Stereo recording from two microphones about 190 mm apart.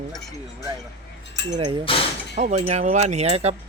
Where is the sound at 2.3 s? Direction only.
40° right (ahead or behind).